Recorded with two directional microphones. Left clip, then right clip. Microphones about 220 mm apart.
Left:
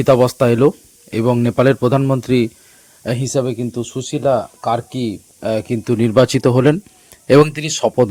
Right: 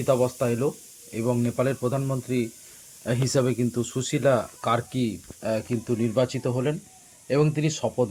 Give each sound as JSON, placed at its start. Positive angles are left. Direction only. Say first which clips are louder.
{"t": 0.0, "sound": "speech", "louder": "left 11 dB", "side_deg": 55}
{"t": 3.2, "sound": "speech", "louder": "left 4 dB", "side_deg": 10}
{"t": 4.9, "sound": "speech", "louder": "left 6 dB", "side_deg": 30}